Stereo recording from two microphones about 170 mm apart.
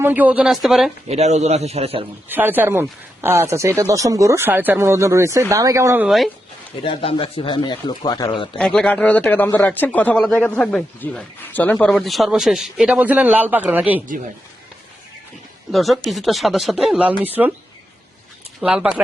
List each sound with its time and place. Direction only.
0.0 s speech: 10° right (ahead or behind)
1.0 s a man's voice: 40° right (ahead or behind)
2.3 s speech: 10° right (ahead or behind)
6.8 s speech: 30° left (ahead or behind)
8.5 s speech: 5° left (ahead or behind)
15.7 s speech: centre (ahead or behind)
18.6 s speech: 5° right (ahead or behind)